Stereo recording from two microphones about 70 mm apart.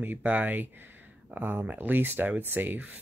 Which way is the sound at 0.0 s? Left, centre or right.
Right.